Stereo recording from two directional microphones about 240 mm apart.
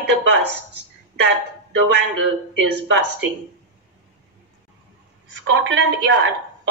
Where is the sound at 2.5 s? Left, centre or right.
Right.